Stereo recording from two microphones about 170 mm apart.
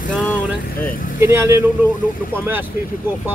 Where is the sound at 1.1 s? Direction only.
15° right (ahead or behind).